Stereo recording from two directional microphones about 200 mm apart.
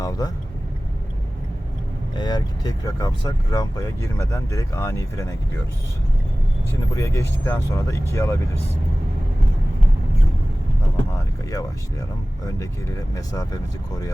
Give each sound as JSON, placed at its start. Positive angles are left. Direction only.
{"t": 0.0, "sound": "speech", "side_deg": 20}
{"t": 2.1, "sound": "speech", "side_deg": 20}
{"t": 6.9, "sound": "speech", "side_deg": 15}
{"t": 13.1, "sound": "speech", "side_deg": 20}